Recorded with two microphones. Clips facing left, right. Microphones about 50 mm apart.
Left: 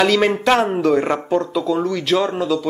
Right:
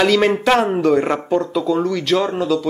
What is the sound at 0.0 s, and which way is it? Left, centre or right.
Speech, centre.